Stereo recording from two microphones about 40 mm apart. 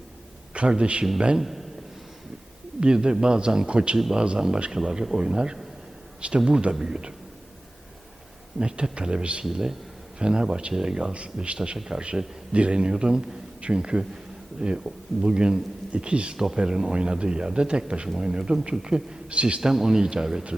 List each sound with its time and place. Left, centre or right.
0.5 s speech: right
1.4 s a man's voice: centre
2.8 s speech: right
8.5 s speech: right
9.4 s speech: centre
11.1 s speech: right
19.7 s speech: centre